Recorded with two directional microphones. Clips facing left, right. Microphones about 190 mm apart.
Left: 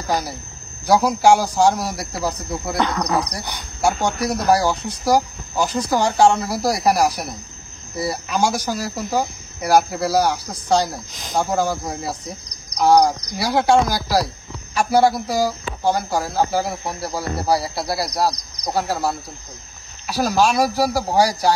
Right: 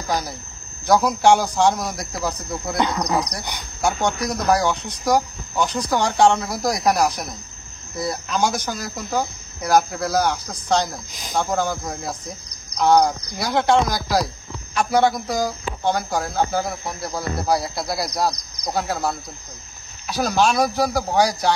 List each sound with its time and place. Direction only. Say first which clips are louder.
0.8 s speech: left 1 dB; 5° left (ahead or behind)
2.8 s speech: even; 15° right (ahead or behind)
3.8 s speech: left 2 dB; 5° left (ahead or behind)
13.3 s speech: left 2 dB; 5° left (ahead or behind)